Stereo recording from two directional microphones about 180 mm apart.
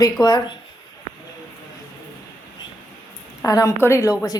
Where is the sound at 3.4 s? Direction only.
20° left (ahead or behind).